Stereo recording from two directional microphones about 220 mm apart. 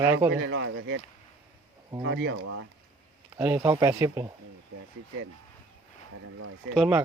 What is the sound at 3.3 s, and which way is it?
Speech, 10° right (ahead or behind).